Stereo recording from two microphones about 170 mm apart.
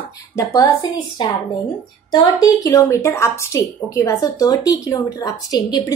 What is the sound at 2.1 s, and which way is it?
Speech, 25° left (ahead or behind).